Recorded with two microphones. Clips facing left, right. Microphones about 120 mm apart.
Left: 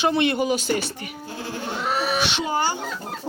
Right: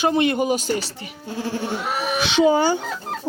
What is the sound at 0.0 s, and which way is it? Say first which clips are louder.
Speech: right 2 dB; 40° right (ahead or behind).